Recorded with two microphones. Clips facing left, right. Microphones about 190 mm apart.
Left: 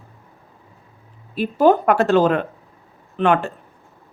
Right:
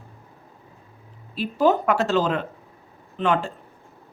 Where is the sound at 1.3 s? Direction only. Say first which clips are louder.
Left 5 dB; 55° left (ahead or behind).